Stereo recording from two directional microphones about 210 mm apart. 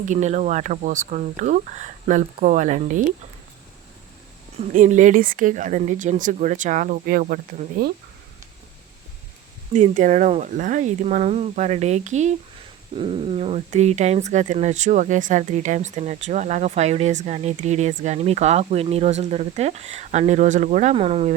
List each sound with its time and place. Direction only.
0.0 s speech: 35° right (ahead or behind)
4.7 s speech: 35° right (ahead or behind)
9.7 s speech: 35° right (ahead or behind)